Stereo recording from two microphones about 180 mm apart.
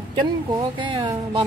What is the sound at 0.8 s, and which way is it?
Speech, 25° right (ahead or behind).